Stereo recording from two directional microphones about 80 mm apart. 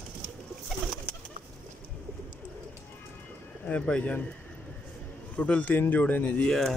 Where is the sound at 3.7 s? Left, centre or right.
Centre.